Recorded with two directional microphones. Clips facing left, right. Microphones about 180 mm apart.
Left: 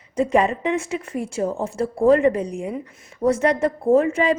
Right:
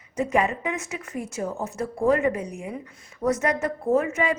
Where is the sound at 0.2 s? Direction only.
30° left (ahead or behind).